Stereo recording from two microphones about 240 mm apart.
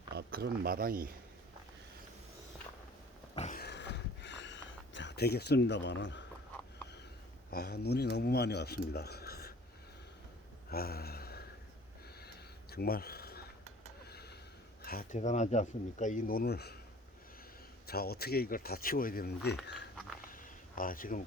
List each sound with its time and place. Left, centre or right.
0.1 s speech: right
3.3 s a sound: left
3.6 s a sound: left
7.5 s speech: left
10.7 s a sound: left
12.7 s speech: left
14.1 s gasp: left
14.8 s speech: left
17.8 s speech: left
20.7 s speech: left